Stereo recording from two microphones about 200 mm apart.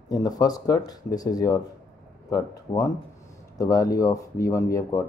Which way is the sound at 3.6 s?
15° left (ahead or behind).